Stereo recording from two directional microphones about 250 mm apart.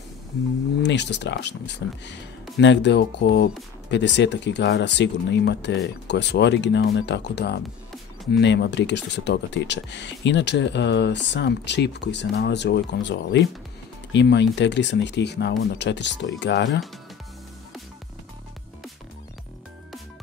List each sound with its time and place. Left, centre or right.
0.8 s speech: left